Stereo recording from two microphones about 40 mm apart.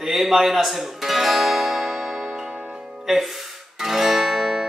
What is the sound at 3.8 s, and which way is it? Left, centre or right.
Music, centre.